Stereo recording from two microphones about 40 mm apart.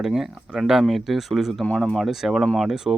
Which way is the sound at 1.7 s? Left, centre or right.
Left.